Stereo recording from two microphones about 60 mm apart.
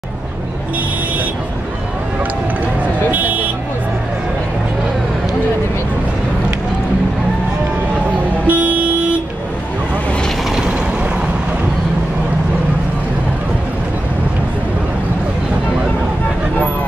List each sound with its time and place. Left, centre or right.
3.1 s vehicle: right
8.5 s vehicle: right
10.5 s mechanisms: centre